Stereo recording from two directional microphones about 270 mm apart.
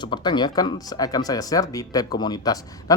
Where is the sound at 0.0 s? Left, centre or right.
Centre.